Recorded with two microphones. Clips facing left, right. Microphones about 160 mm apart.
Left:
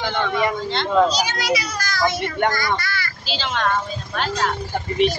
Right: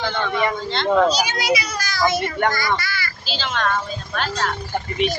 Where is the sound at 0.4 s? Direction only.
15° left (ahead or behind).